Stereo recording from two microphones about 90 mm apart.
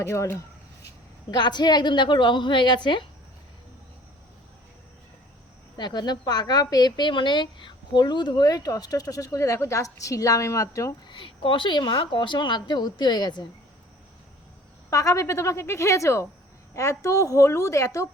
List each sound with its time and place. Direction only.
0.0 s a woman's voice: 30° left (ahead or behind)
1.3 s a woman's voice: 55° left (ahead or behind)
5.7 s speech: 55° left (ahead or behind); by 10.9 s 35° left (ahead or behind)
11.1 s a woman's voice: 70° left (ahead or behind); by 13.4 s 50° left (ahead or behind)
14.8 s a woman's voice: 35° left (ahead or behind)